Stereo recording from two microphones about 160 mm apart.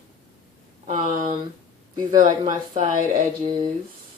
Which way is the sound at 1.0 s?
55° right (ahead or behind).